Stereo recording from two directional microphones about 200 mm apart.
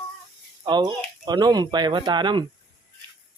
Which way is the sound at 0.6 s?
20° right (ahead or behind).